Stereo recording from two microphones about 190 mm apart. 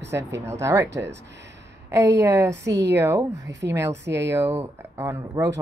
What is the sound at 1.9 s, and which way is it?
Speech, 15° right (ahead or behind).